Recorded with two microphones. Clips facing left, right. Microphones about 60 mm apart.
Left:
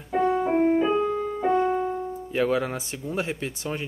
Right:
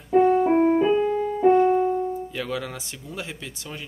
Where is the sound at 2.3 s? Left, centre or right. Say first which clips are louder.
Left 6 dB; left.